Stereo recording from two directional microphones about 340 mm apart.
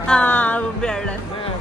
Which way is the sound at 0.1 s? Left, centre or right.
Centre.